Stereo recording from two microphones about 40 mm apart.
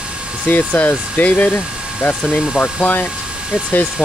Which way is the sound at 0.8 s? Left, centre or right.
Left.